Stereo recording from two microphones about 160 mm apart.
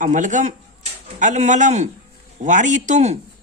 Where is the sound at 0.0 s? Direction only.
55° right (ahead or behind).